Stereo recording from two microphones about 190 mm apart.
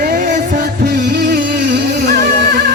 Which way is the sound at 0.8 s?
60° right (ahead or behind).